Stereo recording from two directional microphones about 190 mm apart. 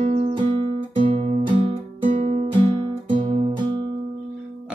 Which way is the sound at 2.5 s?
25° right (ahead or behind).